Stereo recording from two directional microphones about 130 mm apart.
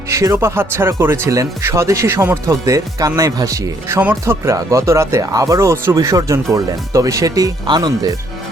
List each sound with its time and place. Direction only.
0.1 s speech: 25° right (ahead or behind)